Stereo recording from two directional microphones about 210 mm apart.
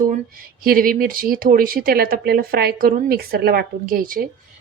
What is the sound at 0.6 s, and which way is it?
Speech, 45° right (ahead or behind).